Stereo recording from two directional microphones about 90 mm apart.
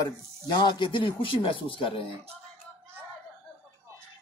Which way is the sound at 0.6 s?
60° left (ahead or behind).